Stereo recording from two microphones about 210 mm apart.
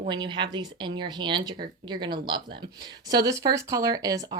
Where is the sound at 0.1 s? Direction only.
20° right (ahead or behind).